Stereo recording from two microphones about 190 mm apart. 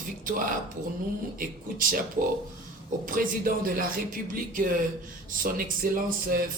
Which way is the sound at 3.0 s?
50° right (ahead or behind).